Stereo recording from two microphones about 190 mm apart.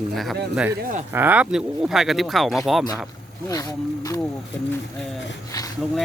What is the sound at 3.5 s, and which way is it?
Speech, 20° left (ahead or behind).